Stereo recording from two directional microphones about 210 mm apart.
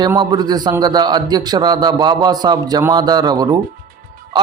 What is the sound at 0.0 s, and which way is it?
A man's voice, 20° right (ahead or behind).